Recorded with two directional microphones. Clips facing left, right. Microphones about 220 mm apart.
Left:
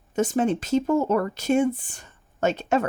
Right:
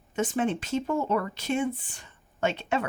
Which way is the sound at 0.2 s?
40° left (ahead or behind).